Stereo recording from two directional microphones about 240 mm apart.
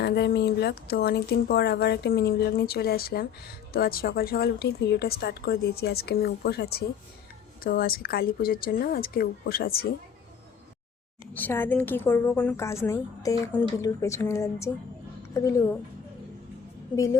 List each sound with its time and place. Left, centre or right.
0.0 s speech: left
11.3 s a woman's voice: centre
16.9 s a woman's voice: centre